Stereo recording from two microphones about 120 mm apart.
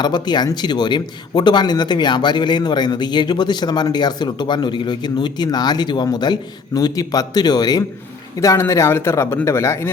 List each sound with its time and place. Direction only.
0.0 s speech: 35° left (ahead or behind)